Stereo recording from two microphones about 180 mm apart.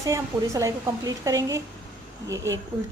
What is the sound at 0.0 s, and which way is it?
A woman's voice, 15° right (ahead or behind).